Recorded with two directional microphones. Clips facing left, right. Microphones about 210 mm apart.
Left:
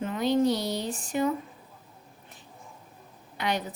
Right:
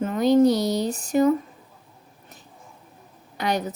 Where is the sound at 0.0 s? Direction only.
45° right (ahead or behind).